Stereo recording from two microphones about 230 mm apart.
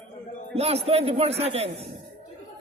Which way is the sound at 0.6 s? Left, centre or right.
Right.